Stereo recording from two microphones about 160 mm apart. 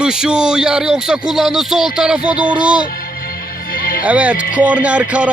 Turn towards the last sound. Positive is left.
turn(degrees=-10)  # may be behind; listen again after turning